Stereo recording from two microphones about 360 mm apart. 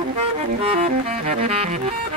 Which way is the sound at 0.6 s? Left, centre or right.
Centre.